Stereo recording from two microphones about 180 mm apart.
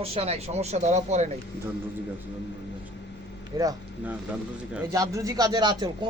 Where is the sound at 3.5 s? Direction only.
25° right (ahead or behind).